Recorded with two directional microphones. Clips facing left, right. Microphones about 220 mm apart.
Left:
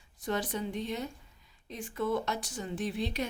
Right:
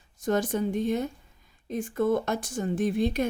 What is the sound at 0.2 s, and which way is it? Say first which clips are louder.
Speech: right 7 dB; 45° right (ahead or behind).